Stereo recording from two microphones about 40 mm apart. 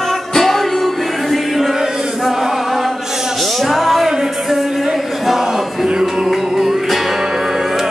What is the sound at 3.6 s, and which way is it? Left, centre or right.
Music, centre.